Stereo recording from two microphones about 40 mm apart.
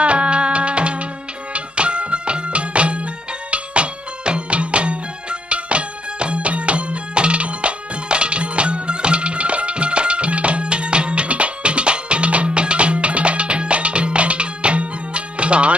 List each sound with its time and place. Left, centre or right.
0.0 s music: right